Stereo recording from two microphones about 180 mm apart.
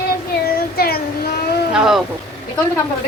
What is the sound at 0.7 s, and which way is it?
Child singing, 60° left (ahead or behind).